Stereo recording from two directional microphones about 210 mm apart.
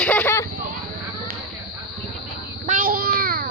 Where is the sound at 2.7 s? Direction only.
40° right (ahead or behind).